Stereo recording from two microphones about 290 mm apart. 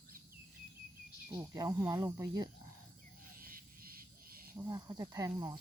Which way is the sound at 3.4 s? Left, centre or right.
Right.